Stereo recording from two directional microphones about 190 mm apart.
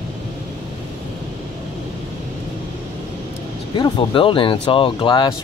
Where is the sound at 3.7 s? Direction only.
25° left (ahead or behind).